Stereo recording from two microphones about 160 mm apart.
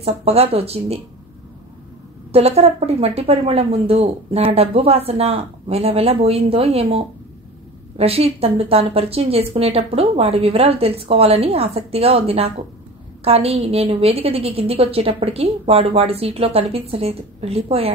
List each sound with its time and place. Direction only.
0.0 s a woman's voice: 40° right (ahead or behind)
2.3 s a woman's voice: 40° right (ahead or behind)